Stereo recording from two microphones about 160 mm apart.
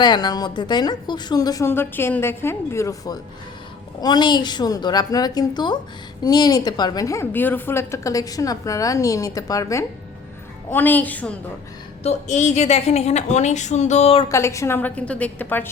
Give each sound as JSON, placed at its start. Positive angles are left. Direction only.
{"t": 0.0, "sound": "a woman's voice", "side_deg": 25}
{"t": 12.0, "sound": "a woman's voice", "side_deg": 45}
{"t": 14.3, "sound": "a woman's voice", "side_deg": 20}